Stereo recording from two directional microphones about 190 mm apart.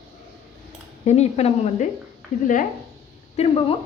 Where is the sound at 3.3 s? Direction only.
30° left (ahead or behind).